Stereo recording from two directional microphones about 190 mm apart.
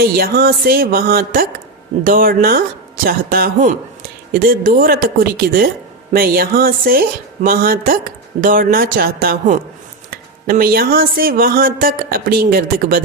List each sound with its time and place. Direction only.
0.0 s speech: 50° right (ahead or behind)